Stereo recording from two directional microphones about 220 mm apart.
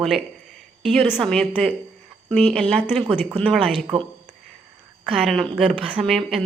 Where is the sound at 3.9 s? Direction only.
25° right (ahead or behind).